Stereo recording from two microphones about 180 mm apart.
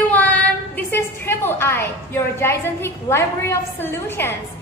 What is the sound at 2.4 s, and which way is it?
A woman's voice, 15° left (ahead or behind).